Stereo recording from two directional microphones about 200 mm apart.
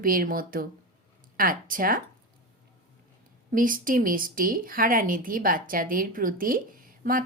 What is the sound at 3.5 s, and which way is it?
A woman's voice, 45° right (ahead or behind).